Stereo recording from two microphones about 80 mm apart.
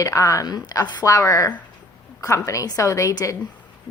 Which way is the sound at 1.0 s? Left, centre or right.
Left.